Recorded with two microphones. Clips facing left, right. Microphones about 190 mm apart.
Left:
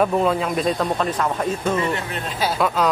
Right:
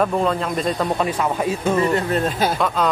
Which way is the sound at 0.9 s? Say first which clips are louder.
Right 1 dB; 10° right (ahead or behind).